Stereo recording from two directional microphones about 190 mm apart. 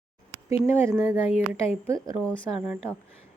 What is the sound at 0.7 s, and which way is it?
A woman's voice, 15° right (ahead or behind).